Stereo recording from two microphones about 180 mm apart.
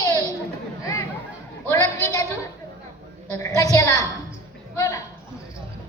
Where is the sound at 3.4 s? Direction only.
20° left (ahead or behind).